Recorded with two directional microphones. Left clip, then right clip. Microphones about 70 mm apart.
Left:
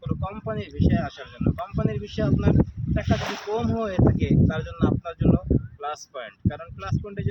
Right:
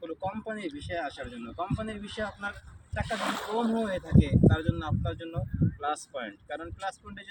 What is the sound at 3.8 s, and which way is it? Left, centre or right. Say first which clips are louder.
A man's voice: left 5 dB; left.